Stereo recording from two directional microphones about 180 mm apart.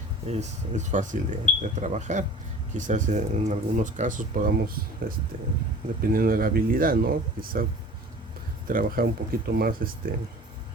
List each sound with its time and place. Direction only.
0.3 s speech: 40° right (ahead or behind)